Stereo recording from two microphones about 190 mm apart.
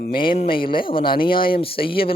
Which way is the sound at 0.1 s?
25° left (ahead or behind).